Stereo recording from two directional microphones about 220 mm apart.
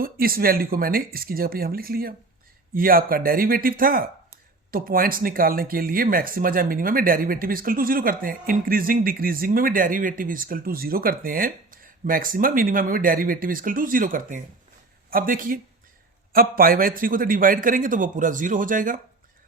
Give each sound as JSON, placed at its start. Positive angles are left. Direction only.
{"t": 0.0, "sound": "speech", "side_deg": -40}